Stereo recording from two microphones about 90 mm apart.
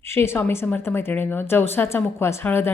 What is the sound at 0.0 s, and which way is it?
A woman's voice, 30° left (ahead or behind).